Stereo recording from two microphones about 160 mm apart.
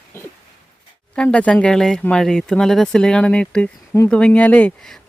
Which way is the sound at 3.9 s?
15° left (ahead or behind).